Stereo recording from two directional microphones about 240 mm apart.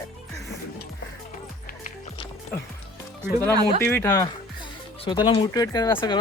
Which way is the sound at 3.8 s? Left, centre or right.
Centre.